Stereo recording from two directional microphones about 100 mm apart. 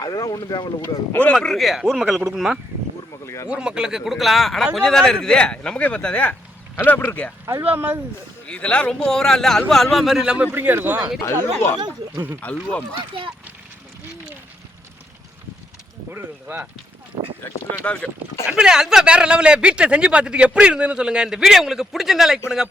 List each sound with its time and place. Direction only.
0.0 s speech: 40° left (ahead or behind)
0.8 s speech: 20° left (ahead or behind)
1.3 s speech: 5° left (ahead or behind)
3.2 s speech: 25° left (ahead or behind)
3.5 s speech: 10° right (ahead or behind); by 7.3 s 15° left (ahead or behind)
7.4 s speech: 25° right (ahead or behind)
8.4 s speech: 10° left (ahead or behind); by 11.0 s 20° right (ahead or behind)
11.5 s speech: 25° left (ahead or behind)
13.0 s speech: 60° right (ahead or behind)
16.1 s speech: 20° right (ahead or behind)
17.1 s speech: 60° right (ahead or behind)
17.8 s speech: 15° left (ahead or behind)
18.4 s a man's voice: 5° right (ahead or behind)